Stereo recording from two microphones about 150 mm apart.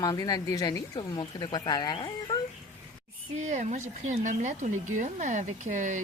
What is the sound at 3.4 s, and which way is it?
Speech, 55° right (ahead or behind).